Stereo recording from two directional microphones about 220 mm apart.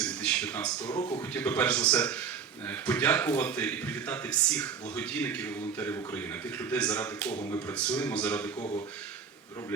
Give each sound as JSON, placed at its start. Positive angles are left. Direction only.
{"t": 0.0, "sound": "a sound", "side_deg": 5}
{"t": 0.9, "sound": "a man's voice", "side_deg": 20}
{"t": 1.3, "sound": "speech", "side_deg": 5}